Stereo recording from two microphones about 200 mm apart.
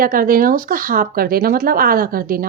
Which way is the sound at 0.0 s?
45° right (ahead or behind).